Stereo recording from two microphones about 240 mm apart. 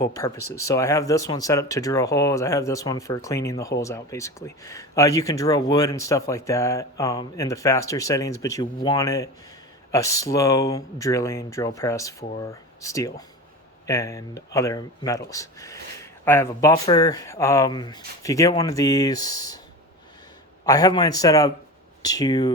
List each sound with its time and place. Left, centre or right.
0.0 s speech: centre
20.7 s speech: centre